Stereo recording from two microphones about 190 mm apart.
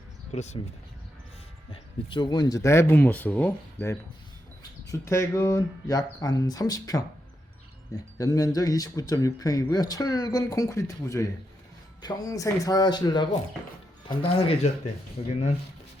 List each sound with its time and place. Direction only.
0.3 s speech: 35° left (ahead or behind)
1.7 s speech: 25° left (ahead or behind)
8.2 s speech: 20° left (ahead or behind); by 15.3 s 35° left (ahead or behind)